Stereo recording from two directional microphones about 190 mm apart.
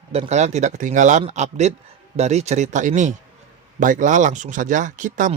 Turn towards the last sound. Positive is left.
turn(degrees=-40)  # may be behind; listen again after turning